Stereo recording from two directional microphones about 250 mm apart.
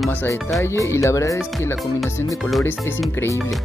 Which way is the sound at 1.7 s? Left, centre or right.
Centre.